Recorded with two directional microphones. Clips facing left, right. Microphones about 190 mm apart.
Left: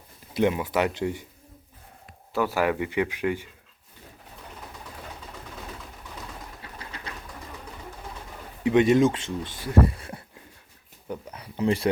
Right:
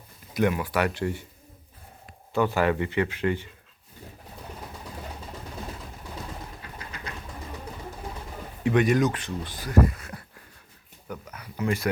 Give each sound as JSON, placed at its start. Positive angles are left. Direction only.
{"t": 0.3, "sound": "speech", "side_deg": 20}
{"t": 2.3, "sound": "speech", "side_deg": 5}
{"t": 8.6, "sound": "speech", "side_deg": 25}